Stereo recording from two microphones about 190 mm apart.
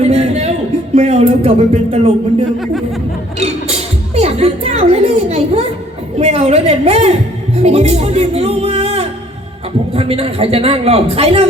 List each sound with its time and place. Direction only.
0.0 s a sound: 35° right (ahead or behind)
0.9 s a man's voice: 35° right (ahead or behind)
3.4 s a woman's voice: 35° right (ahead or behind)